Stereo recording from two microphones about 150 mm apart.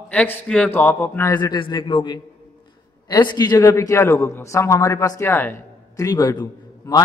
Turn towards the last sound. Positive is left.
turn(degrees=25)  # may be behind; listen again after turning